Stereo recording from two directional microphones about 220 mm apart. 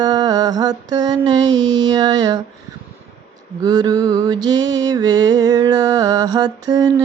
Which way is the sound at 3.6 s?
20° right (ahead or behind).